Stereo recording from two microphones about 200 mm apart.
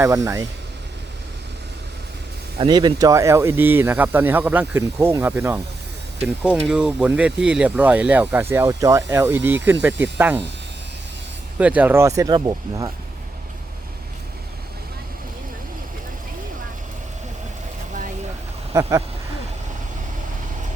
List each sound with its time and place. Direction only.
0.0 s speech: 15° right (ahead or behind)
2.6 s speech: 20° right (ahead or behind)
11.5 s speech: 5° right (ahead or behind)
18.7 s speech: 15° right (ahead or behind)